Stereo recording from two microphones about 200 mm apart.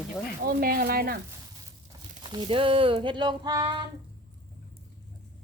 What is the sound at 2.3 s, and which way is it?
Speech, 25° right (ahead or behind).